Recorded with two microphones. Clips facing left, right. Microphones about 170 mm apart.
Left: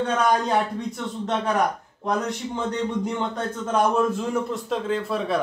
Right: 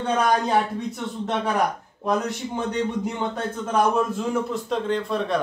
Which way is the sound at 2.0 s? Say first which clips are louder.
Right 1 dB; 5° right (ahead or behind).